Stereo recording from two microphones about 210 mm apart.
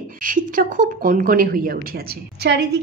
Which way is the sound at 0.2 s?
40° right (ahead or behind).